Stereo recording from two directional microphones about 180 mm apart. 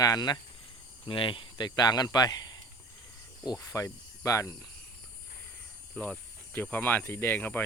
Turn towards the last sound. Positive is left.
turn(degrees=10)  # may be behind; listen again after turning